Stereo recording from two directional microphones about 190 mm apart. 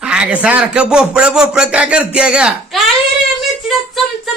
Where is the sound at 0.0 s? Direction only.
5° right (ahead or behind).